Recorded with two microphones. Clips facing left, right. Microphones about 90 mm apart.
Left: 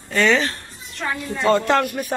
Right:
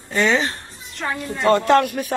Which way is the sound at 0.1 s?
15° right (ahead or behind).